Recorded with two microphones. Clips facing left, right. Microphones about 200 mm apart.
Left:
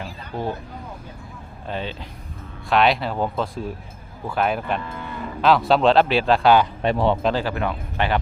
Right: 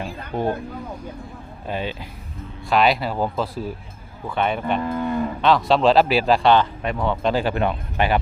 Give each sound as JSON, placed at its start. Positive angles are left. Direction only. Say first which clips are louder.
{"t": 1.6, "sound": "speech", "louder": "right 2 dB", "side_deg": -10}
{"t": 4.8, "sound": "cattle", "louder": "right 10 dB", "side_deg": -45}
{"t": 5.4, "sound": "speech", "louder": "left 1 dB", "side_deg": 0}
{"t": 6.8, "sound": "speech", "louder": "left 4 dB", "side_deg": 25}
{"t": 7.3, "sound": "speech", "louder": "right 3 dB", "side_deg": -20}